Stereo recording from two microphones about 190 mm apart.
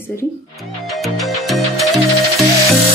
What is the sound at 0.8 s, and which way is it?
Music, centre (ahead or behind).